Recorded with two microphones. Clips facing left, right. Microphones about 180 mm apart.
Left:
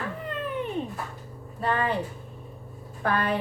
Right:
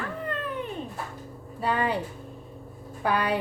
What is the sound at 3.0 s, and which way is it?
Speech, 10° right (ahead or behind).